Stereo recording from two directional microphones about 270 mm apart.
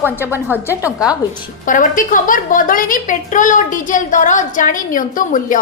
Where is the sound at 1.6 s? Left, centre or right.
Left.